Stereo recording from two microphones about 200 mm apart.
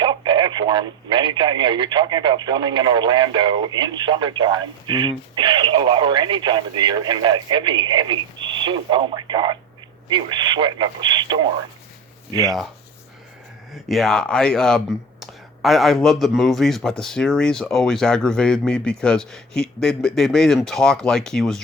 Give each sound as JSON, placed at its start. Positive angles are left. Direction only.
{"t": 0.0, "sound": "speech", "side_deg": -20}
{"t": 13.7, "sound": "speech", "side_deg": 0}